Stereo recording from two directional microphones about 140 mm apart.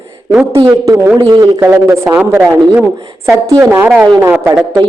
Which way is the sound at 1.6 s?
20° right (ahead or behind).